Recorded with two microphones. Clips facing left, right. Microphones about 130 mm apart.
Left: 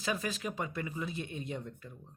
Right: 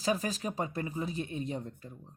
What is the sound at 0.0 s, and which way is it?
Speech, 35° right (ahead or behind).